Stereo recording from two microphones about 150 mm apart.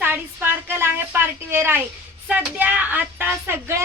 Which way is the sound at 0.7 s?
15° right (ahead or behind).